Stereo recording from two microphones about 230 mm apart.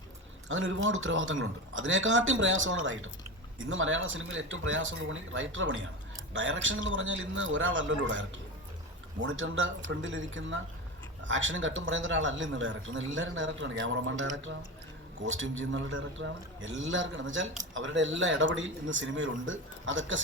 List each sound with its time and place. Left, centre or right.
0.4 s a man's voice: right
9.2 s speech: right